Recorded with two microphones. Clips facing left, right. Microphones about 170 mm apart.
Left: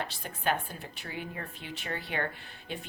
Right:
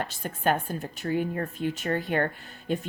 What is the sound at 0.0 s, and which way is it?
Speech, 45° right (ahead or behind).